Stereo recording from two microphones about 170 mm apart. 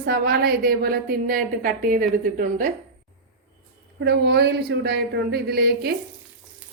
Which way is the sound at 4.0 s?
80° right.